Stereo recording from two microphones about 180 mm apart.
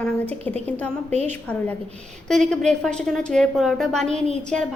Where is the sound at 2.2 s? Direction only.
5° left (ahead or behind).